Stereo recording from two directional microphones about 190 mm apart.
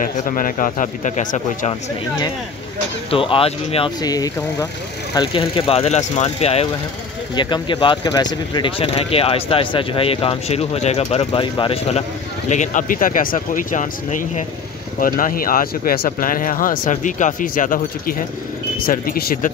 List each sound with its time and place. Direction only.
0.0 s speech: 45° left (ahead or behind)
1.7 s speech: 20° left (ahead or behind)
12.4 s speech: 40° left (ahead or behind)